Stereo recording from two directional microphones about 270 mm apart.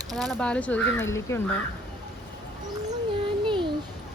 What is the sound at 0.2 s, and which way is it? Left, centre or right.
Speech, centre.